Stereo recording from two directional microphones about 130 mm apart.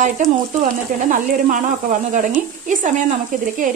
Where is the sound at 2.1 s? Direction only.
80° right.